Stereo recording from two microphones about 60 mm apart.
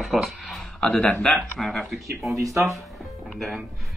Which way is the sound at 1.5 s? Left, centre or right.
Centre.